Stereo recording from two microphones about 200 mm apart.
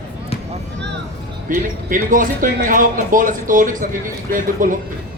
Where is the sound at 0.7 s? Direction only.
60° right (ahead or behind).